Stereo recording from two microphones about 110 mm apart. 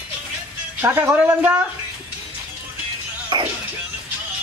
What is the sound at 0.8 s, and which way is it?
Speech, 20° right (ahead or behind).